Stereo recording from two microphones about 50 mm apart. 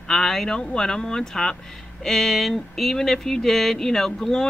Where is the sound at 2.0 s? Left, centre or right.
Centre.